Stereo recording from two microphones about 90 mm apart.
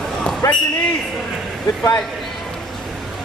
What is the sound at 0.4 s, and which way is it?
Speech, 35° left (ahead or behind).